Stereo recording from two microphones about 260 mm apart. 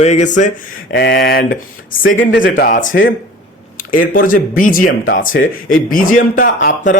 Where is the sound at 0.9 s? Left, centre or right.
Left.